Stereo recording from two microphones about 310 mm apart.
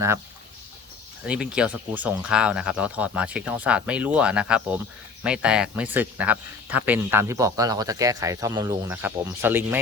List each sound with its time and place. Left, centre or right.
1.2 s speech: centre